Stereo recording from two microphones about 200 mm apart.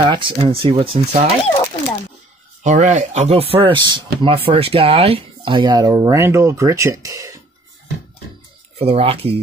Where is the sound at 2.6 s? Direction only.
40° right (ahead or behind); by 7.3 s 15° right (ahead or behind).